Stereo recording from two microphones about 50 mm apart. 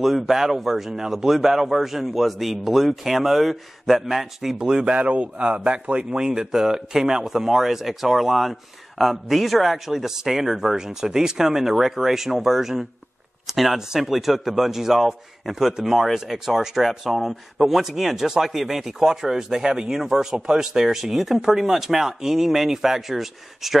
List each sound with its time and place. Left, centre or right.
0.0 s speech: centre
4.6 s a man's voice: centre
6.1 s speech: centre